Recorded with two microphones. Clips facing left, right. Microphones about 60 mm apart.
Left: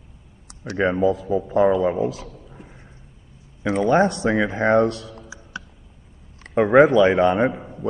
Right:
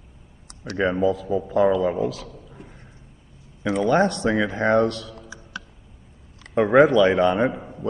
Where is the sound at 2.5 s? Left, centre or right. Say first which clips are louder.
Even; centre.